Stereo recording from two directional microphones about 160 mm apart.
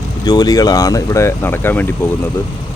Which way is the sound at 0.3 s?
25° left (ahead or behind).